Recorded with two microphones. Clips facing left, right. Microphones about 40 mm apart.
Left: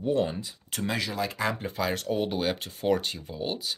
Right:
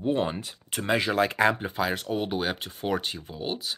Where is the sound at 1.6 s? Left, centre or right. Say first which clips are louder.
Right 1 dB; centre.